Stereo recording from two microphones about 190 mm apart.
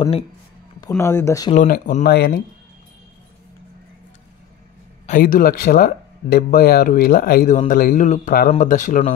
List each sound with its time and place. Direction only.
0.7 s speech: 15° left (ahead or behind)
1.5 s speech: 40° left (ahead or behind)
2.0 s speech: 55° left (ahead or behind)
5.0 s speech: 45° left (ahead or behind)